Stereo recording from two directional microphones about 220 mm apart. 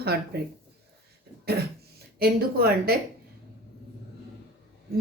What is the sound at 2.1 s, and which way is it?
Speech, 45° right (ahead or behind).